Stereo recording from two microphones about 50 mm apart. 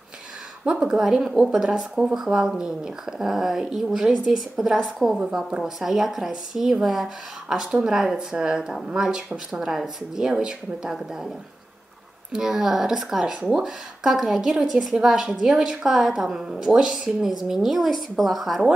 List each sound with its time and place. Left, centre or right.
0.7 s a woman's voice: centre
5.1 s a woman's voice: centre
5.6 s a woman's voice: centre